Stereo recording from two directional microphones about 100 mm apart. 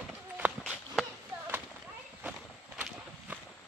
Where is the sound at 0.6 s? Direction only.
5° left (ahead or behind).